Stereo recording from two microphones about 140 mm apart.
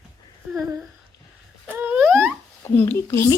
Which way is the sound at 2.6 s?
15° left (ahead or behind).